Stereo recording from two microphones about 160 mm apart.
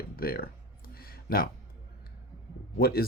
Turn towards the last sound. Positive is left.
turn(degrees=75)  # may be behind; listen again after turning